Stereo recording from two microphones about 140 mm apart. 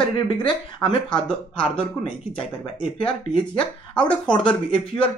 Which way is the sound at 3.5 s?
10° left (ahead or behind).